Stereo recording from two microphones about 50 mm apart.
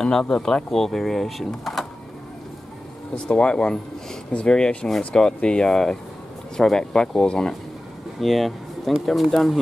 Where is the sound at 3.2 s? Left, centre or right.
Centre.